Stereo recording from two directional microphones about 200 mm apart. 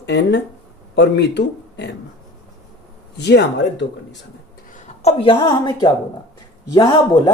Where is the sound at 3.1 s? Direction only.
60° left (ahead or behind).